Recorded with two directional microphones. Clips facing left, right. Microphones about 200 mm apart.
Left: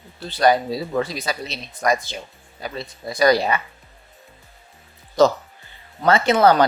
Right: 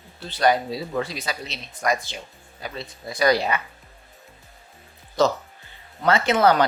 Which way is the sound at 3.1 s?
40° left (ahead or behind).